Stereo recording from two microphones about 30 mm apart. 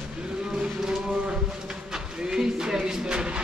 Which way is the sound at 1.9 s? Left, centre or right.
Right.